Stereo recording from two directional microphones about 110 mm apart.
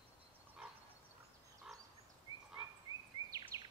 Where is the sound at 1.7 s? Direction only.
5° right (ahead or behind).